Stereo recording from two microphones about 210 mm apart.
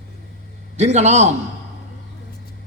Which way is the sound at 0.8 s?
35° right (ahead or behind).